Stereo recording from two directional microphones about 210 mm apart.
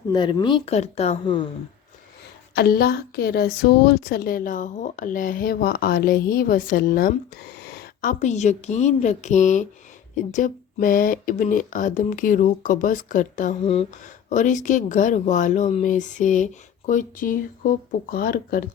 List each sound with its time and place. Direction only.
0.1 s speech: 20° left (ahead or behind)
2.6 s a woman's voice: 45° left (ahead or behind)
8.2 s speech: 35° left (ahead or behind)